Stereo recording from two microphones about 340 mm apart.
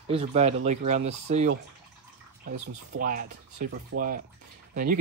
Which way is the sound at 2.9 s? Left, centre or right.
Right.